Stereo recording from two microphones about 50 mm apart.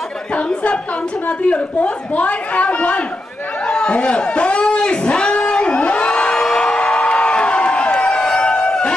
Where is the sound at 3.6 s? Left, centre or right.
Centre.